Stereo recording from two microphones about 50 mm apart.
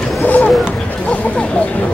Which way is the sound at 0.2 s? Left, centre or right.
Left.